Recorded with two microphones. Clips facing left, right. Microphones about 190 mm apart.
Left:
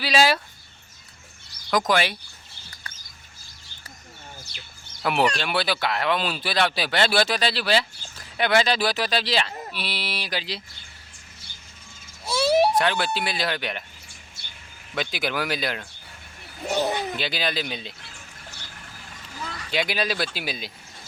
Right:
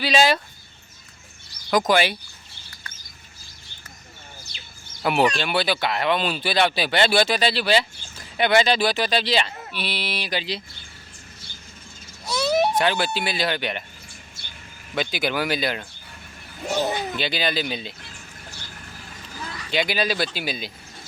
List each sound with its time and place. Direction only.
0.0 s speech: 5° left (ahead or behind)
1.9 s speech: centre (ahead or behind)
4.5 s chicken: 55° left (ahead or behind)
5.0 s speech: centre (ahead or behind)
12.2 s a sound: 10° left (ahead or behind)
12.5 s baby cry: 30° left (ahead or behind)
12.7 s speech: centre (ahead or behind)
14.9 s speech: centre (ahead or behind)
16.6 s speech: 15° left (ahead or behind)
16.9 s speech: centre (ahead or behind)
19.7 s speech: centre (ahead or behind)